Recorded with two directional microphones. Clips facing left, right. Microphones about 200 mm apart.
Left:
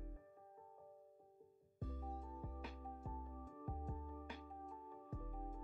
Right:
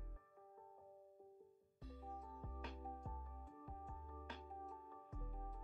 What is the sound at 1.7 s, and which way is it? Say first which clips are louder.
Music: left 5 dB; 50° left (ahead or behind).